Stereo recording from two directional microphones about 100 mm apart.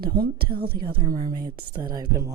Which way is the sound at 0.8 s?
55° right (ahead or behind).